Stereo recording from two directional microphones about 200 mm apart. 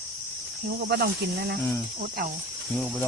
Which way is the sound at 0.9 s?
50° right (ahead or behind).